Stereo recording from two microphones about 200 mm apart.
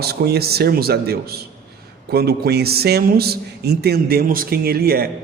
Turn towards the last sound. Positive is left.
turn(degrees=-50)  # may be behind; listen again after turning